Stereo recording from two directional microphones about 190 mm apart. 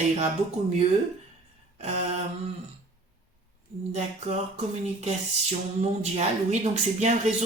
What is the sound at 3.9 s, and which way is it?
Speech, 35° right (ahead or behind).